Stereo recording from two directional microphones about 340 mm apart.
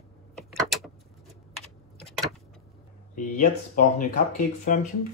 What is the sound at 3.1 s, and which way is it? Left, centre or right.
Speech, left.